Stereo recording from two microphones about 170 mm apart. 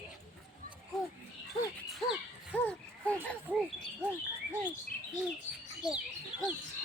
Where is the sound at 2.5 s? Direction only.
5° left (ahead or behind).